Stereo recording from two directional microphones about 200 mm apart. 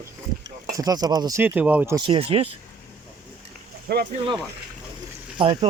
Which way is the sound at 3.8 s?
50° right (ahead or behind).